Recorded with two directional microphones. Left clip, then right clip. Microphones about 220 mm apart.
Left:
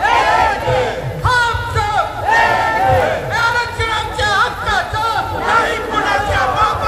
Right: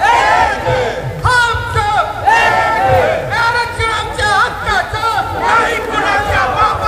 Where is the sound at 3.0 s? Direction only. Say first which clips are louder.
Right 2 dB; 10° right (ahead or behind).